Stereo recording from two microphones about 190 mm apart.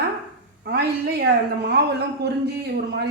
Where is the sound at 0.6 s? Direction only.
55° right (ahead or behind).